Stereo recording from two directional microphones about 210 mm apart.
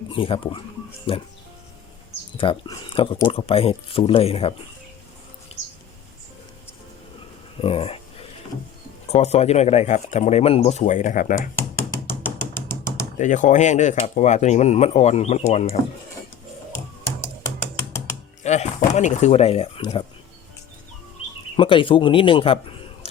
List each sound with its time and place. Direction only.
0.1 s speech: 25° left (ahead or behind)
2.4 s speech: 25° left (ahead or behind)
5.5 s a sound: 30° left (ahead or behind)
7.6 s speech: 25° left (ahead or behind)
9.1 s speech: 30° left (ahead or behind)
11.5 s knock: 10° left (ahead or behind)
13.1 s speech: 35° left (ahead or behind)
17.2 s music: 15° left (ahead or behind)
18.4 s speech: 35° left (ahead or behind)
21.5 s speech: 25° left (ahead or behind)